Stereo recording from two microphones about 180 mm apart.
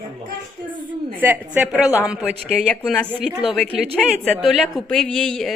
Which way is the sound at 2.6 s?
5° left (ahead or behind).